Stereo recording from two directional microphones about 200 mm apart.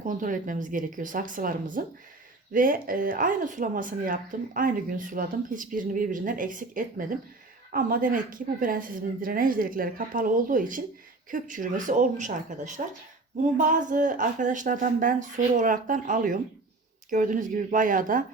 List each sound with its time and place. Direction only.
0.0 s speech: 40° right (ahead or behind)